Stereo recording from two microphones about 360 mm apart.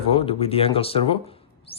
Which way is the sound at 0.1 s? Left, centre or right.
Centre.